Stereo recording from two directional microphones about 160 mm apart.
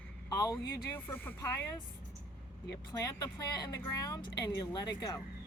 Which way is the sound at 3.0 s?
25° left (ahead or behind).